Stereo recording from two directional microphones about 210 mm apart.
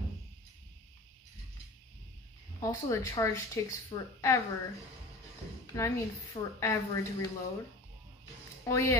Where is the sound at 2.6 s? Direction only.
15° left (ahead or behind).